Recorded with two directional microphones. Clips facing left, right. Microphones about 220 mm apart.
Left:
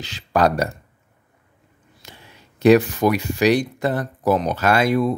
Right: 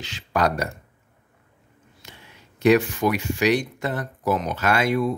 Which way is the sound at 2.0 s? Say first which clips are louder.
Left 2 dB; 35° left (ahead or behind).